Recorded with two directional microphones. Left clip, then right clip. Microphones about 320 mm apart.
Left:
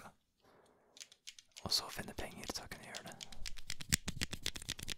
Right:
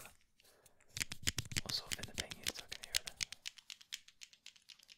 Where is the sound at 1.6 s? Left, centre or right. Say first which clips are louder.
Left 5 dB; left.